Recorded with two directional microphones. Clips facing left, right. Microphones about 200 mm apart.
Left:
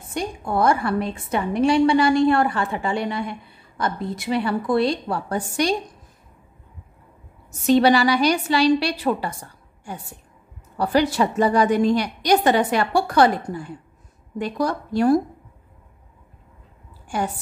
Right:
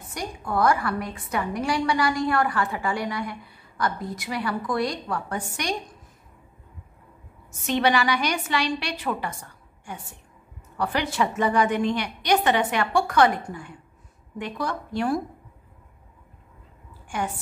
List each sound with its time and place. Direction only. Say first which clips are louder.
0.1 s a woman's voice: left 4 dB; 25° left (ahead or behind)
7.6 s a woman's voice: left 7 dB; 35° left (ahead or behind)